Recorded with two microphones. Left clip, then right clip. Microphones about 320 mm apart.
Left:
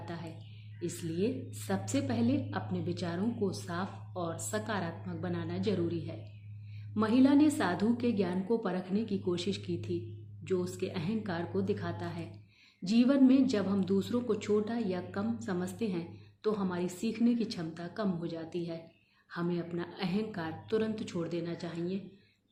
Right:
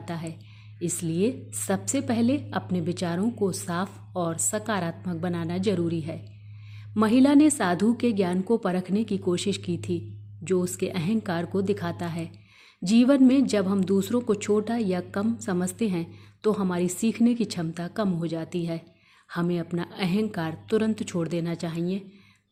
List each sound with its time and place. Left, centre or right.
0.0 s speech: right